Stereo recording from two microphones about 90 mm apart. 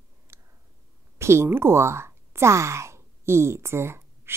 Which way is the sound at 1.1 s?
30° right (ahead or behind).